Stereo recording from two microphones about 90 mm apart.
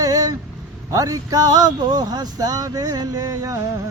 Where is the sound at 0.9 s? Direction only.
40° right (ahead or behind).